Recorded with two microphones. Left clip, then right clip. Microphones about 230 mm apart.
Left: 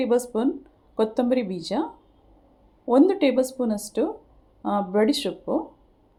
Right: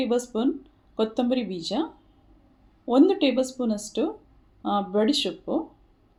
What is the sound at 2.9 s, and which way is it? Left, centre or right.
Speech, centre.